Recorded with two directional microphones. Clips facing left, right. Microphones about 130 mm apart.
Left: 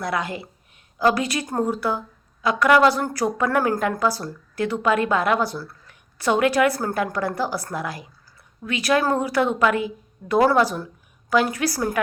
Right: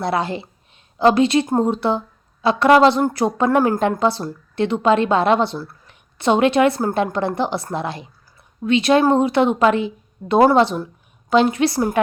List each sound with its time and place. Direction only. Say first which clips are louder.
0.0 s a woman's voice: right 5 dB; 30° right (ahead or behind)